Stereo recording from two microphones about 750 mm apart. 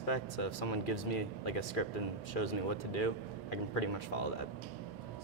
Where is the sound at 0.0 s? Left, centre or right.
Left.